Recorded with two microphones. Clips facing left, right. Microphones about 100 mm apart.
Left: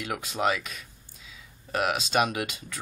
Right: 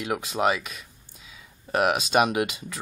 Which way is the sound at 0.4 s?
10° right (ahead or behind).